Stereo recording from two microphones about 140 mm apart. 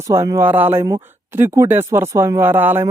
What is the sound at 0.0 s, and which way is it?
A woman's voice, 20° right (ahead or behind).